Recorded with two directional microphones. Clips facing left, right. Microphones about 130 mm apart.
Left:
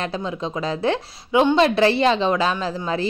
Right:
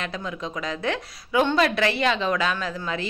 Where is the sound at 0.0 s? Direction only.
30° left (ahead or behind).